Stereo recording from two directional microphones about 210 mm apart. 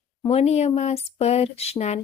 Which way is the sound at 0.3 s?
30° left (ahead or behind).